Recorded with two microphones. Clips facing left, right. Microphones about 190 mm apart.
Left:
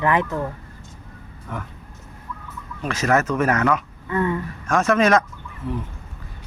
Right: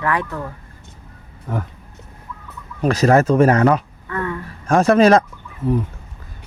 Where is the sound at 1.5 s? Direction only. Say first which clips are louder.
Right 6 dB; 35° right (ahead or behind).